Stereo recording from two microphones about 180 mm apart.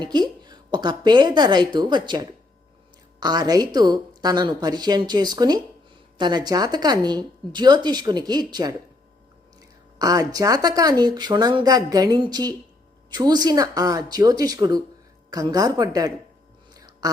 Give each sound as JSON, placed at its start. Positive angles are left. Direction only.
{"t": 0.0, "sound": "a woman's voice", "side_deg": -25}
{"t": 10.0, "sound": "a woman's voice", "side_deg": -20}
{"t": 16.7, "sound": "a sound", "side_deg": -20}